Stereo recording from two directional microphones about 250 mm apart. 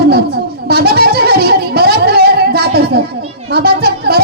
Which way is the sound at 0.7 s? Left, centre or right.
Right.